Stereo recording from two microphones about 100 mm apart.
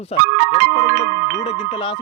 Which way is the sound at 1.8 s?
55° left (ahead or behind).